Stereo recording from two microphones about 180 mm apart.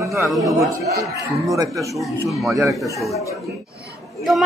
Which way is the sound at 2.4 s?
Centre (ahead or behind).